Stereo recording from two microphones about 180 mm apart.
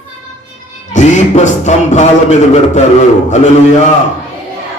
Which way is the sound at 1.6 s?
40° left (ahead or behind).